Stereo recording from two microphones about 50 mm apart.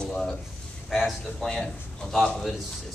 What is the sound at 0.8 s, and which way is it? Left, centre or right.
A man's voice, centre.